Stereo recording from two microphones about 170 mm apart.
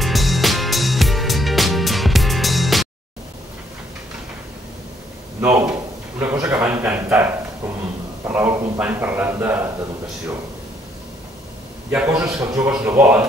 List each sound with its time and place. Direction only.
0.0 s music: centre (ahead or behind)
5.4 s a sound: 10° right (ahead or behind)
8.3 s a man's voice: 10° right (ahead or behind)
11.9 s a man's voice: 5° right (ahead or behind)